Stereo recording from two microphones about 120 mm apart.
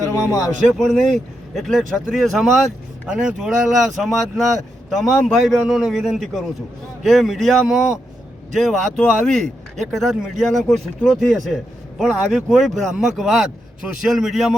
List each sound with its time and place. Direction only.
0.3 s speech: 30° left (ahead or behind)
0.7 s speech: centre (ahead or behind)